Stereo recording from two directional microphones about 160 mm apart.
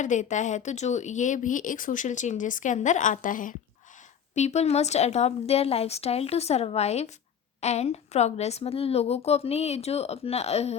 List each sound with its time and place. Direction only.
0.0 s speech: 50° left (ahead or behind)
4.4 s a woman's voice: 45° left (ahead or behind)